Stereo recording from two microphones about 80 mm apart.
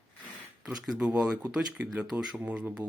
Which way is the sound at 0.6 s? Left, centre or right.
Centre.